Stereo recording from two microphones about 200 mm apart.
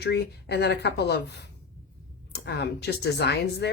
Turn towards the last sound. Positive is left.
turn(degrees=55)  # may be behind; listen again after turning